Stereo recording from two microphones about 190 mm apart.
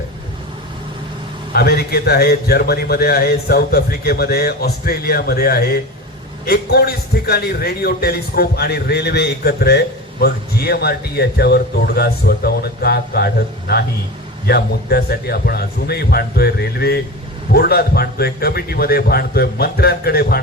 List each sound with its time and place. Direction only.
1.5 s a man's voice: 55° left (ahead or behind)